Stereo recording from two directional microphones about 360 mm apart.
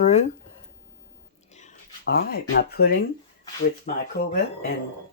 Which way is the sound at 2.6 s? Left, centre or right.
Left.